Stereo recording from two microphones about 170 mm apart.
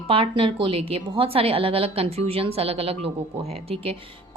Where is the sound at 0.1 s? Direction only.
30° right (ahead or behind).